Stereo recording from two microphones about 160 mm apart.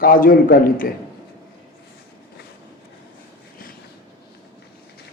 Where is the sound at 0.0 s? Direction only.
60° left (ahead or behind).